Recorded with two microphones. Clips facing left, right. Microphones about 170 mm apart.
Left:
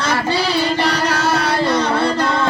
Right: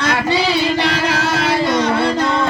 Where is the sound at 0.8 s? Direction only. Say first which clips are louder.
Even; 40° left (ahead or behind).